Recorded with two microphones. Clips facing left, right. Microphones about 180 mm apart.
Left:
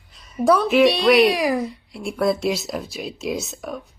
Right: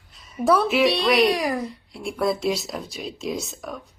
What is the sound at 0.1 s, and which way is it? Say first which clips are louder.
Speech: left 2 dB; centre (ahead or behind).